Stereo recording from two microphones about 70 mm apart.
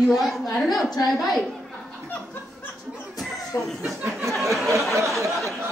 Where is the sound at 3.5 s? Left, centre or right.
Left.